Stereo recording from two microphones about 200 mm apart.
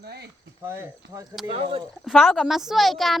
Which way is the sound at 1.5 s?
30° right (ahead or behind).